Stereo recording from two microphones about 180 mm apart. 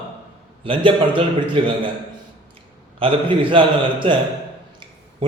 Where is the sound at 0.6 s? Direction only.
30° right (ahead or behind).